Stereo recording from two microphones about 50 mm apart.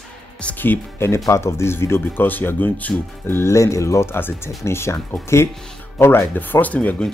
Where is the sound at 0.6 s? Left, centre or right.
Left.